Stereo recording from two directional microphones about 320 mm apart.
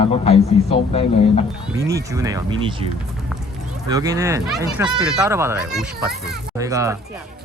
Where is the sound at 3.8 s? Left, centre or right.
Centre.